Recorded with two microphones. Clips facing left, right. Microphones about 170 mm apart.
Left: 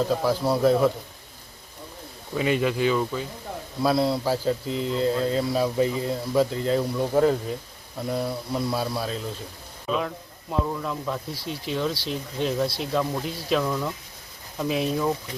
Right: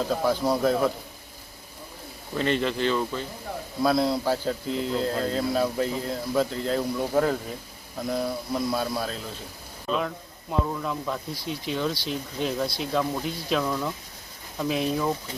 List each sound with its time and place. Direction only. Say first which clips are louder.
0.1 s speech: left 1 dB; centre (ahead or behind)
2.3 s speech: left 2 dB; 5° left (ahead or behind)